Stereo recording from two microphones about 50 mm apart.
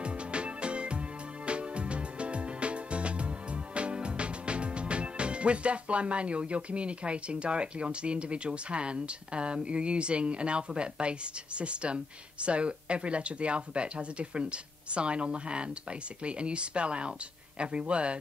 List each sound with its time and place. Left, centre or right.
0.0 s music: right
17.6 s speech: right